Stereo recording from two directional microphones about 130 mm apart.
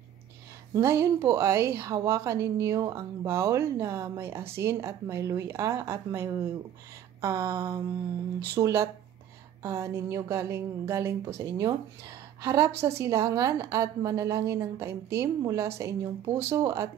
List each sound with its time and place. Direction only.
0.7 s a woman's voice: 20° right (ahead or behind)
7.2 s a sound: 25° right (ahead or behind)
8.5 s a woman's voice: 25° right (ahead or behind)